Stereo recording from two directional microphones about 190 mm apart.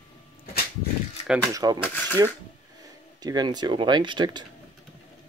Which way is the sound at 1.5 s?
20° right (ahead or behind).